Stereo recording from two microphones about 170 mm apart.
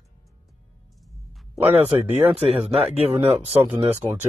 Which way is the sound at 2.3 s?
35° right (ahead or behind).